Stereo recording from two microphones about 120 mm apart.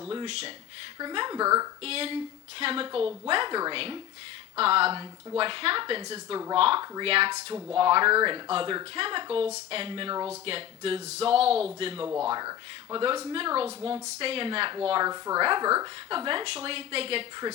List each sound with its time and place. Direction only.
0.3 s speech: 60° right (ahead or behind)
0.9 s speech: 40° right (ahead or behind)
1.8 s speech: 55° right (ahead or behind)
12.0 s speech: 20° right (ahead or behind)
12.3 s speech: 35° right (ahead or behind)
13.3 s speech: 50° right (ahead or behind)
15.0 s speech: 30° right (ahead or behind); by 17.2 s 55° right (ahead or behind)